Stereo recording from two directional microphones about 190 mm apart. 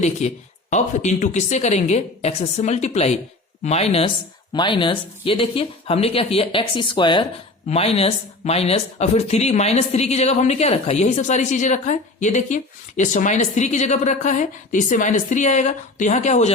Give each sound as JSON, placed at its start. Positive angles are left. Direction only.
{"t": 0.0, "sound": "speech", "side_deg": 35}